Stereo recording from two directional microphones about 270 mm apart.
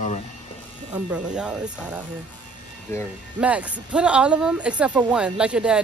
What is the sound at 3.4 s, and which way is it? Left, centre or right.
Speech, centre.